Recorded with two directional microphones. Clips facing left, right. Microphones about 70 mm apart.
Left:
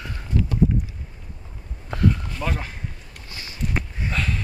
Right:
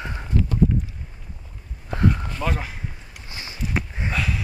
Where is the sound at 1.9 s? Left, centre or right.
Right.